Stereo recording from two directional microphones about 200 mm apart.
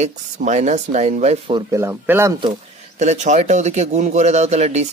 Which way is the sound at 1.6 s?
15° right (ahead or behind).